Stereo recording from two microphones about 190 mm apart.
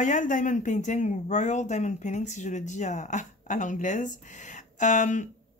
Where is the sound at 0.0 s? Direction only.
40° left (ahead or behind).